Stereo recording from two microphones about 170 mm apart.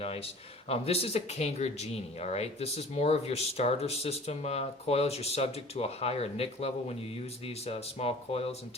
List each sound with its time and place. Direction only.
0.0 s a man's voice: 35° left (ahead or behind)